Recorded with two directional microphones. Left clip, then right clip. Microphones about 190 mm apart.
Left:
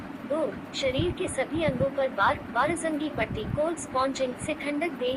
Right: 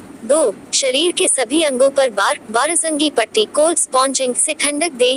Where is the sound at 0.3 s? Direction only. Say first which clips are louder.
Right 12 dB; 60° right (ahead or behind).